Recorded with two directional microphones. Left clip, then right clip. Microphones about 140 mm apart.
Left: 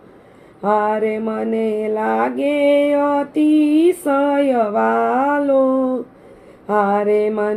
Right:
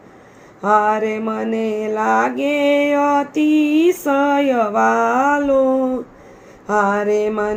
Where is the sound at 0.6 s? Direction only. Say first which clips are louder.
Right 2 dB; 15° left (ahead or behind).